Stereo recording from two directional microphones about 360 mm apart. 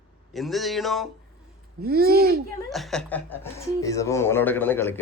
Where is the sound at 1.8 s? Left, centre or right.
Right.